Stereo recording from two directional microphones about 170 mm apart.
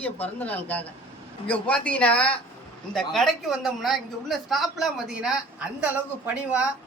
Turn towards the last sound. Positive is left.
turn(degrees=-5)  # may be behind; listen again after turning